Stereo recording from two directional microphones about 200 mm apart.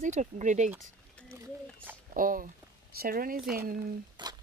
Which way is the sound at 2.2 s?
45° right (ahead or behind).